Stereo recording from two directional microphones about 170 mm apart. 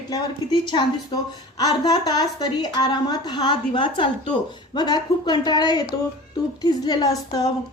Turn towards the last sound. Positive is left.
turn(degrees=20)  # may be behind; listen again after turning